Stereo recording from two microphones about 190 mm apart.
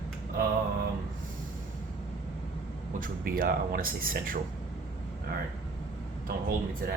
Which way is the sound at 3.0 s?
50° right (ahead or behind).